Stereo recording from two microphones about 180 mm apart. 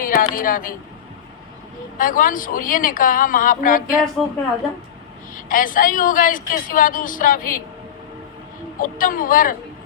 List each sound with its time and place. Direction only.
0.0 s a sound: 50° left (ahead or behind)
2.0 s a woman's voice: 50° left (ahead or behind)
5.3 s a woman's voice: 50° left (ahead or behind)
8.8 s a woman's voice: 50° left (ahead or behind)